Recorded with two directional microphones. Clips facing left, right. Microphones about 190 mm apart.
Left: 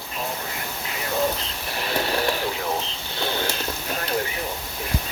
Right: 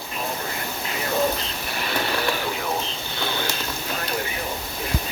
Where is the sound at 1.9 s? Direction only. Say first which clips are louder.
Left 2 dB; 40° left (ahead or behind).